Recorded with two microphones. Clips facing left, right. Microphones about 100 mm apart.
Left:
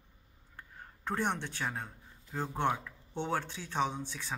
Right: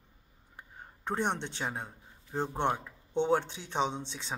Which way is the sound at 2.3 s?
25° right (ahead or behind).